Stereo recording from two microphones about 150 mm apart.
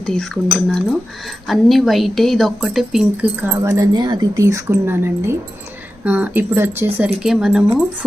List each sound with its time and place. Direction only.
0.0 s speech: 5° left (ahead or behind)
3.5 s speech: 20° right (ahead or behind); by 7.8 s 5° right (ahead or behind)